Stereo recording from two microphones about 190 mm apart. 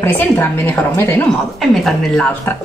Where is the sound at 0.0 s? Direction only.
10° left (ahead or behind).